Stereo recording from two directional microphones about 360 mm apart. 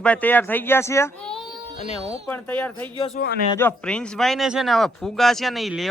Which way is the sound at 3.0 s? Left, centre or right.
Left.